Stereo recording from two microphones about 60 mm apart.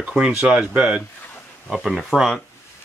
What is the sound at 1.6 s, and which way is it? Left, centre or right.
Speech, centre.